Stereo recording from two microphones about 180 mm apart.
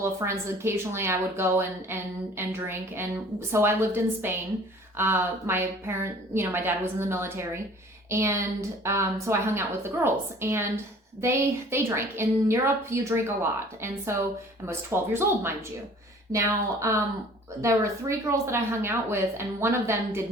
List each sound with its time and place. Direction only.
0.0 s speech: 15° right (ahead or behind)